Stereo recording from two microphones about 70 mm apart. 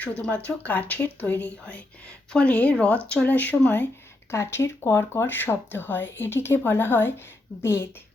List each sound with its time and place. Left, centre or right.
0.0 s speech: centre
4.3 s speech: left